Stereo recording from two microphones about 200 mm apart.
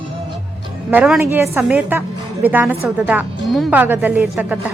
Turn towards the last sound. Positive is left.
turn(degrees=-5)  # may be behind; listen again after turning